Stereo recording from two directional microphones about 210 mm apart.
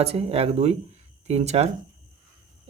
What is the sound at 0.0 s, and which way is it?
A man's voice, 30° right (ahead or behind).